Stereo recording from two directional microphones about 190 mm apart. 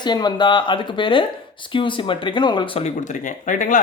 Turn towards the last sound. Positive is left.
turn(degrees=45)  # may be behind; listen again after turning